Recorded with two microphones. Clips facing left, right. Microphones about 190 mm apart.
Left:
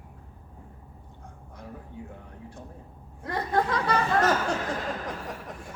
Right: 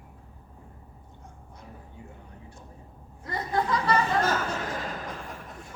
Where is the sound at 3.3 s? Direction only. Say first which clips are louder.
Left 1 dB; 55° left (ahead or behind).